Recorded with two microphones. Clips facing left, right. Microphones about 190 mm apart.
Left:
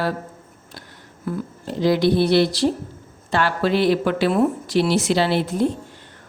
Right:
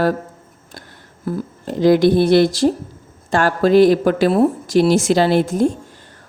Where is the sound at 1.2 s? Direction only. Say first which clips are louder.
Right 3 dB; 40° right (ahead or behind).